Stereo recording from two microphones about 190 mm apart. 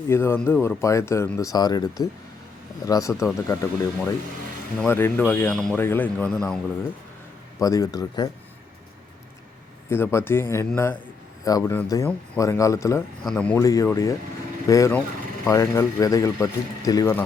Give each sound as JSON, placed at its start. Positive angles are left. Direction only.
{"t": 0.1, "sound": "speech", "side_deg": 10}
{"t": 7.6, "sound": "speech", "side_deg": 20}
{"t": 9.9, "sound": "speech", "side_deg": 15}
{"t": 13.2, "sound": "speech", "side_deg": 5}
{"t": 13.7, "sound": "speech", "side_deg": 15}